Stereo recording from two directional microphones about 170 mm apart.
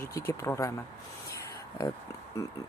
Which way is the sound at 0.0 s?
15° left (ahead or behind).